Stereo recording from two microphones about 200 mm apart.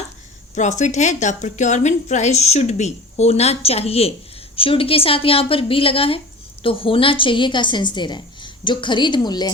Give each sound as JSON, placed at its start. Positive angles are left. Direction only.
{"t": 0.5, "sound": "a woman's voice", "side_deg": 35}